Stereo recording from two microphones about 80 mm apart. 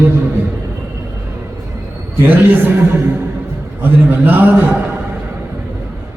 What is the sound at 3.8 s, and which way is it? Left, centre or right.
Speech, right.